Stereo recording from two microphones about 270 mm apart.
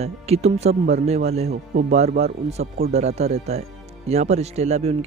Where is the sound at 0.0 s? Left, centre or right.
Right.